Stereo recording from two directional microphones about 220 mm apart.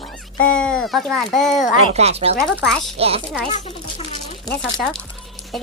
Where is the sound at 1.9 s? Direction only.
30° right (ahead or behind).